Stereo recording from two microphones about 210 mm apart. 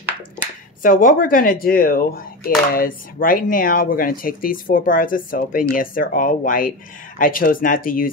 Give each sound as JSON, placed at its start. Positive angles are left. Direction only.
{"t": 0.8, "sound": "speech", "side_deg": 40}